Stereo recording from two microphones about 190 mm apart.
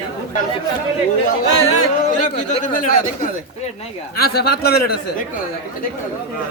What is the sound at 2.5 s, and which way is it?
Speech, 45° left (ahead or behind).